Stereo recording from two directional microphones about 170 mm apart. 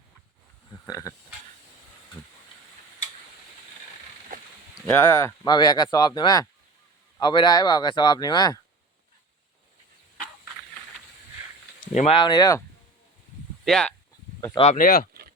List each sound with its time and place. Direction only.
0.9 s speech: 20° left (ahead or behind)
4.9 s speech: 15° left (ahead or behind)
11.9 s speech: 35° left (ahead or behind)
13.7 s speech: 5° left (ahead or behind)
14.5 s speech: 35° left (ahead or behind)
14.8 s speech: 60° left (ahead or behind)